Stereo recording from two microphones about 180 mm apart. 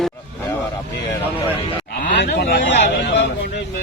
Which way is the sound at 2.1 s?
70° left (ahead or behind).